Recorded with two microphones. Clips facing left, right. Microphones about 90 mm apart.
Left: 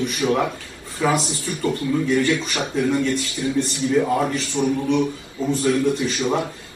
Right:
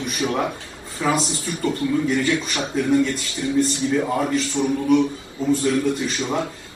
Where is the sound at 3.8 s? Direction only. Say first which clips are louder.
Left 2 dB; 25° right (ahead or behind).